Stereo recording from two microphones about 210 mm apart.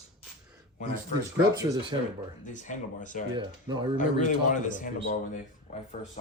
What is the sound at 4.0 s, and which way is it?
Speech, 35° left (ahead or behind).